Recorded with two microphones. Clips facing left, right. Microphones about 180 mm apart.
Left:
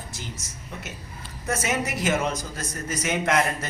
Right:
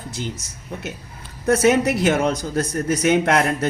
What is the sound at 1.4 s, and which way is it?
A man's voice, 65° right (ahead or behind).